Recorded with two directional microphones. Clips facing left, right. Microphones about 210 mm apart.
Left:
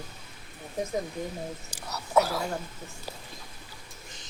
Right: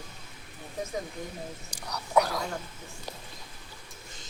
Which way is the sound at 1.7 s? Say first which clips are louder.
Left 1 dB; 5° left (ahead or behind).